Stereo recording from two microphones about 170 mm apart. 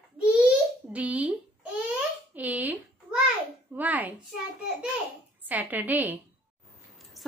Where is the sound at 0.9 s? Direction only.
10° right (ahead or behind).